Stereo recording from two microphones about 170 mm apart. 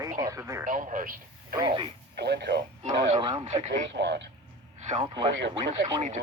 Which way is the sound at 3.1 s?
30° right (ahead or behind).